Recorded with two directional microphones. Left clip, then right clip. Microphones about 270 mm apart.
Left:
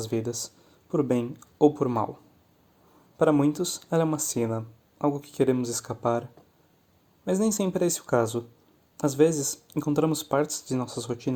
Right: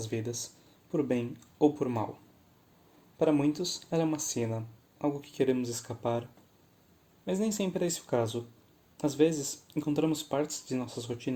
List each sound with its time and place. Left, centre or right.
0.0 s speech: left
3.2 s speech: left
7.3 s speech: left